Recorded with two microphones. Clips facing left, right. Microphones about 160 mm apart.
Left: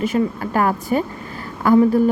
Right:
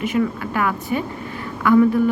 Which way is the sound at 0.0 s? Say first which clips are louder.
Left 1 dB; 35° left (ahead or behind).